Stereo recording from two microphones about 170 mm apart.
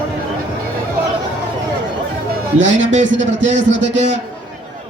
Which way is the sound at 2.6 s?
90° right.